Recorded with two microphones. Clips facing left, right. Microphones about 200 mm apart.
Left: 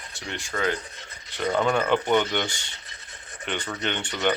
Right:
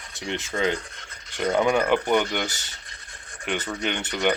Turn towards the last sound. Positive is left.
turn(degrees=-15)  # may be behind; listen again after turning